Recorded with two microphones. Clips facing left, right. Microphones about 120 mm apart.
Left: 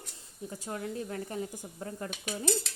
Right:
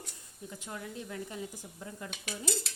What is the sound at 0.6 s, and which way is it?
Speech, 40° left (ahead or behind).